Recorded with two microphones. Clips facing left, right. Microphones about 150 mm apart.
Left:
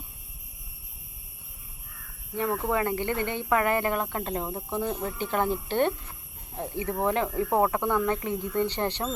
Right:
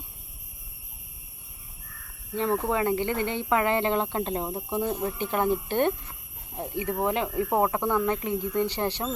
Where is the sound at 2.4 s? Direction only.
20° right (ahead or behind).